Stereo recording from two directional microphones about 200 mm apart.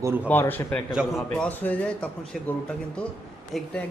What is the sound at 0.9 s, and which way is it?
A man's voice, centre (ahead or behind).